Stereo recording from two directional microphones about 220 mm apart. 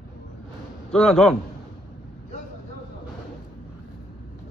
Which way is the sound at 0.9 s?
Centre (ahead or behind).